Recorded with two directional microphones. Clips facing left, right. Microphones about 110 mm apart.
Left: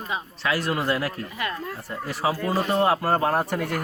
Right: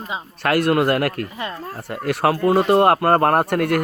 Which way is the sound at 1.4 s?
30° right (ahead or behind).